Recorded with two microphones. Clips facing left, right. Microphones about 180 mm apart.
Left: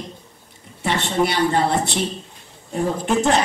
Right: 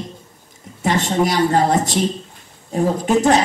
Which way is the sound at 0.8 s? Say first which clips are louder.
Right 3 dB; 40° right (ahead or behind).